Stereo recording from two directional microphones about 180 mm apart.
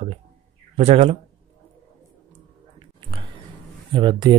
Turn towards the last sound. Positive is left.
turn(degrees=-25)  # may be behind; listen again after turning